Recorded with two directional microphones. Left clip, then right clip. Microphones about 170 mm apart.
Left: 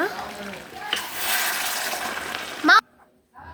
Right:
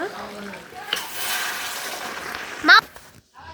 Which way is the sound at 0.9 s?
10° left (ahead or behind).